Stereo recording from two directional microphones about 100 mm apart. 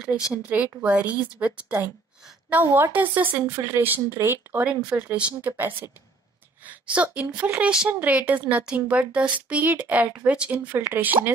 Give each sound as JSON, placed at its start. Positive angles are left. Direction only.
{"t": 0.7, "sound": "a woman's voice", "side_deg": -15}